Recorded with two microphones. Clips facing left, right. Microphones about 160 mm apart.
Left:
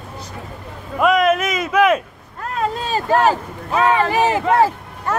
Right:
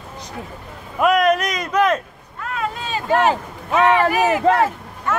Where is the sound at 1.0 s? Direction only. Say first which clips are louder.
Left 1 dB; centre (ahead or behind).